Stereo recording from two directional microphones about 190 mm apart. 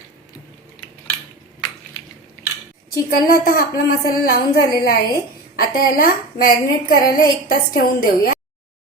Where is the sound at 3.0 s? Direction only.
50° left (ahead or behind).